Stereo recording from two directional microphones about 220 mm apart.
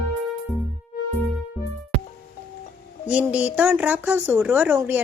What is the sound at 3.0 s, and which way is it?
Speech, 5° right (ahead or behind).